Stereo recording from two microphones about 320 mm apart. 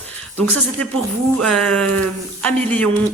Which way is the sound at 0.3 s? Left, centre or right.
Centre.